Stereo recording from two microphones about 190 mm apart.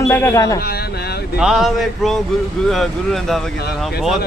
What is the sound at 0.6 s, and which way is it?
Speech, 55° left (ahead or behind).